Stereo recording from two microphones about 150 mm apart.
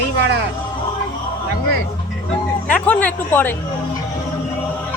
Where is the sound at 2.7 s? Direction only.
10° left (ahead or behind).